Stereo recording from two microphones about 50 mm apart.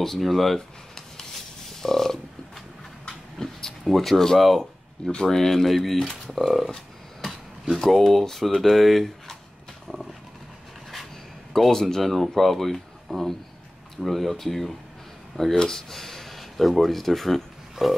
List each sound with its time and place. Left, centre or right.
0.0 s speech: centre
1.7 s a sound: centre
3.8 s speech: centre
11.5 s speech: centre